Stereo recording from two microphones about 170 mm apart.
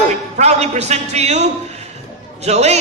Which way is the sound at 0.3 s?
40° right (ahead or behind).